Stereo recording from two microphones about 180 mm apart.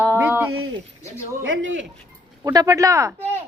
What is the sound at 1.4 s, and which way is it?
Speech, 90° right.